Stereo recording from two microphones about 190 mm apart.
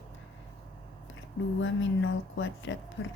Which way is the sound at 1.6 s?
85° left.